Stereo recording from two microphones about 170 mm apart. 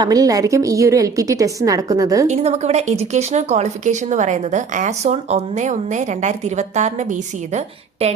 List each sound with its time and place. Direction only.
0.0 s a woman's voice: 20° right (ahead or behind)
2.2 s speech: 40° right (ahead or behind)